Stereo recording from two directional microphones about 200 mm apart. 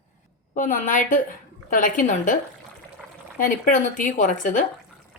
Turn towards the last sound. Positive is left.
turn(degrees=40)  # may be behind; listen again after turning